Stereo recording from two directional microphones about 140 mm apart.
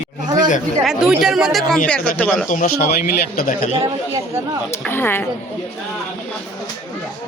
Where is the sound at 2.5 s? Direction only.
80° left.